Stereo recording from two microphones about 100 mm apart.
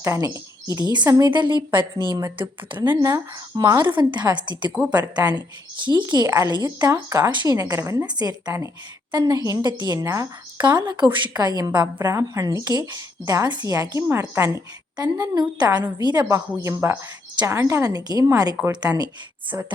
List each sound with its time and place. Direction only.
0.0 s a woman's voice: 30° right (ahead or behind); by 2.2 s 50° right (ahead or behind)
3.0 s a woman's voice: 35° right (ahead or behind)
7.3 s a woman's voice: 50° right (ahead or behind)
7.5 s a woman's voice: 35° right (ahead or behind)
8.0 s a woman's voice: 45° right (ahead or behind)
14.9 s a woman's voice: 45° right (ahead or behind)
16.6 s a woman's voice: 30° right (ahead or behind)
17.9 s a woman's voice: 40° right (ahead or behind)